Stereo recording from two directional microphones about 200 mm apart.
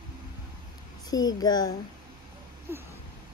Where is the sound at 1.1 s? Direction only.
20° left (ahead or behind).